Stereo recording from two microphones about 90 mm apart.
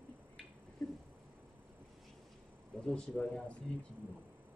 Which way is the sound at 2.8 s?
10° left (ahead or behind).